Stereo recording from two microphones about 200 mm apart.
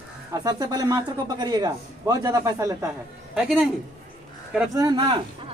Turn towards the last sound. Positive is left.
turn(degrees=-25)  # may be behind; listen again after turning